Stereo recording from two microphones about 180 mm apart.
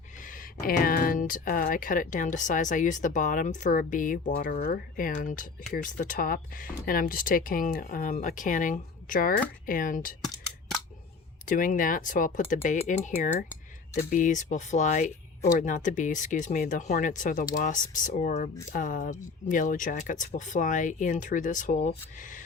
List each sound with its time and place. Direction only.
0.6 s a woman's voice: 55° left (ahead or behind)
11.4 s a woman's voice: 45° left (ahead or behind)